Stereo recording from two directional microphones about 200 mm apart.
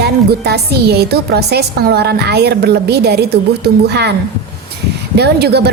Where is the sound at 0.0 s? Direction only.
55° right (ahead or behind).